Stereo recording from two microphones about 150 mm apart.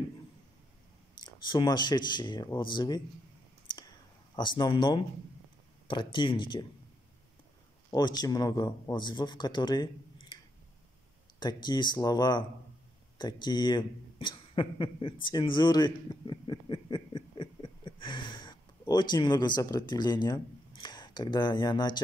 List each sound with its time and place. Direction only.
1.2 s a man's voice: 30° left (ahead or behind)
3.6 s clicking: 25° left (ahead or behind)
4.4 s speech: 30° left (ahead or behind)
7.9 s a man's voice: 25° left (ahead or behind)